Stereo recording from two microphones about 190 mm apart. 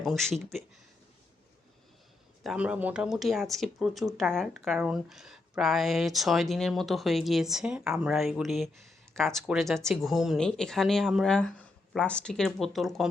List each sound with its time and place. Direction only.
0.0 s speech: centre (ahead or behind)
2.4 s speech: 5° right (ahead or behind)